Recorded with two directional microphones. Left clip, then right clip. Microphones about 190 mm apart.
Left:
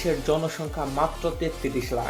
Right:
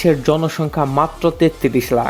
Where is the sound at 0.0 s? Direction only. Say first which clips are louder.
Right 9 dB; 55° right (ahead or behind).